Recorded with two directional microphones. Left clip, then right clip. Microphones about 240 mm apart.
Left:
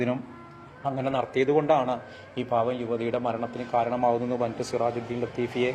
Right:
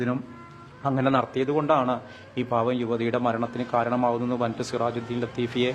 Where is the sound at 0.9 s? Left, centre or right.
Centre.